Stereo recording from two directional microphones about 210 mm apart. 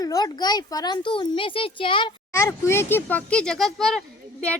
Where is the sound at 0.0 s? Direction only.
20° left (ahead or behind).